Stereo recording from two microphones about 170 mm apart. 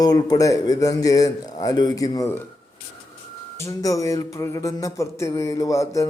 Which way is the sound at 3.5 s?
20° left (ahead or behind).